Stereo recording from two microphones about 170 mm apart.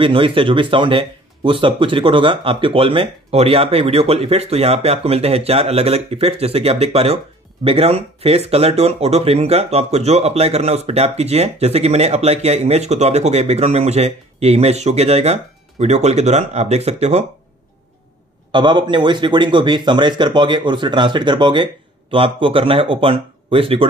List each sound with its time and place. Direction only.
0.0 s speech: 30° right (ahead or behind)
18.5 s speech: 25° right (ahead or behind)